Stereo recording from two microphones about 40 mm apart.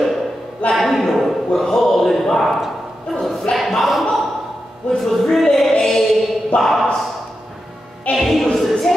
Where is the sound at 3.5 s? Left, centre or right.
Left.